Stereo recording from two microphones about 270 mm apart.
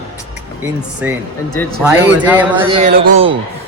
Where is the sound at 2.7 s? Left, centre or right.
Right.